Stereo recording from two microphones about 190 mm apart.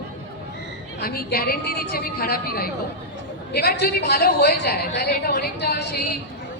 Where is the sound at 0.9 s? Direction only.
50° left (ahead or behind).